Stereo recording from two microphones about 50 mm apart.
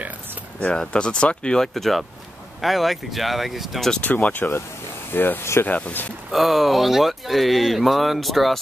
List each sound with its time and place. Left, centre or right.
0.6 s speech: centre
1.7 s speech: centre
4.0 s speech: left
5.4 s speech: left
5.7 s speech: left
6.3 s speech: centre